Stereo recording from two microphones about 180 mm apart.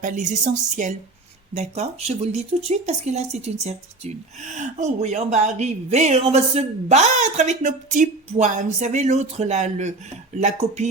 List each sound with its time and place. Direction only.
0.0 s speech: 45° right (ahead or behind)